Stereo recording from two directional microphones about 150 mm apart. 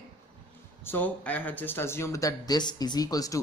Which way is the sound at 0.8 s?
10° left (ahead or behind).